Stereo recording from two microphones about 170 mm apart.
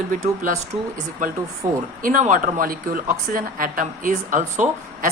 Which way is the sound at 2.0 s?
50° right (ahead or behind).